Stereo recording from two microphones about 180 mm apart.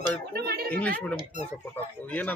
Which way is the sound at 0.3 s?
60° right (ahead or behind).